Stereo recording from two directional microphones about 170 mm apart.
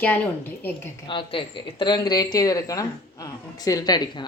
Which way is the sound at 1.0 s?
30° left (ahead or behind).